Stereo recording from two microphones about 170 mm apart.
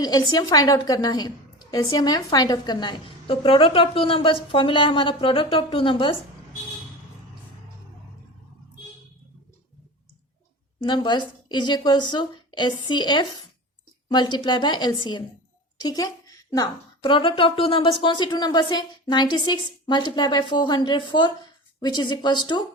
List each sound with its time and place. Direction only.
0.0 s a woman's voice: 25° left (ahead or behind)
10.8 s a woman's voice: 25° left (ahead or behind)